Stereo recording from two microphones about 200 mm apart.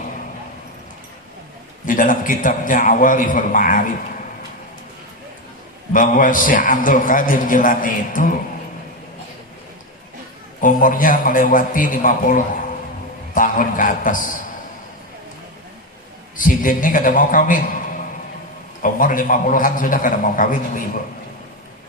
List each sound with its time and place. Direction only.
1.8 s a man's voice: 40° left (ahead or behind)
5.9 s a man's voice: 40° left (ahead or behind)
10.6 s a man's voice: 45° left (ahead or behind)
16.4 s a man's voice: 45° left (ahead or behind)
18.8 s a man's voice: 45° left (ahead or behind)